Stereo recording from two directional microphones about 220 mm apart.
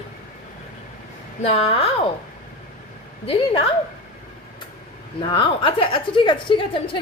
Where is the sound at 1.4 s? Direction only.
30° left (ahead or behind).